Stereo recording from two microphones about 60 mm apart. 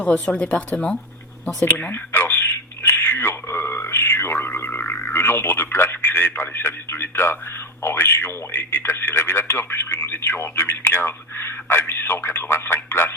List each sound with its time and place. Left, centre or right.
0.0 s speech: centre
1.9 s a sound: left
7.8 s speech: left